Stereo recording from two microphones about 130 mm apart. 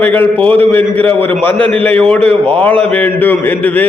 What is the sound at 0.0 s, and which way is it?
A man's voice, 15° left (ahead or behind).